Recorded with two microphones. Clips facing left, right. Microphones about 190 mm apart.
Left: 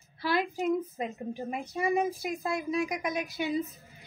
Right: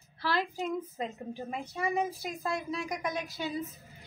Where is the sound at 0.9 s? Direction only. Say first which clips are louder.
Left 2 dB; 15° left (ahead or behind).